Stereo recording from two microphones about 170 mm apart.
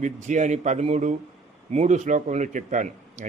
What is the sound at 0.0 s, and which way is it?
A man's voice, 45° right (ahead or behind).